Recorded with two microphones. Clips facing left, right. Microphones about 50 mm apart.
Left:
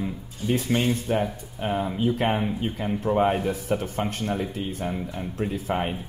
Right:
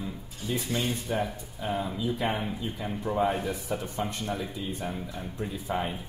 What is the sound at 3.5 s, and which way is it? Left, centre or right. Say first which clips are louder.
Speech: left 6 dB; left.